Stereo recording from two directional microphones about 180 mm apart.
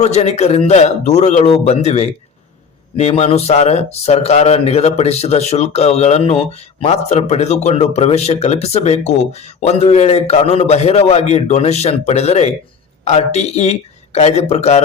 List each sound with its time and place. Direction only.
0.0 s speech: 35° left (ahead or behind)